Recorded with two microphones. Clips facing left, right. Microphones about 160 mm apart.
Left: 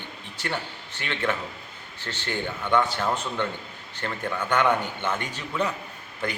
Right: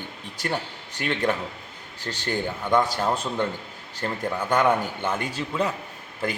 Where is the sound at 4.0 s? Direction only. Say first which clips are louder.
Right 2 dB; 30° right (ahead or behind).